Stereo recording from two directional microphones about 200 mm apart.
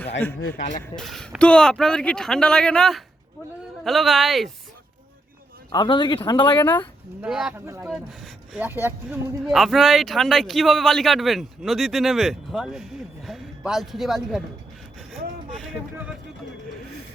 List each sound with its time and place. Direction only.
0.4 s speech: 45° left (ahead or behind)
0.9 s speech: centre (ahead or behind)
5.7 s speech: 20° left (ahead or behind)
7.2 s speech: centre (ahead or behind)
7.6 s speech: 15° right (ahead or behind)
7.9 s speech: 5° right (ahead or behind)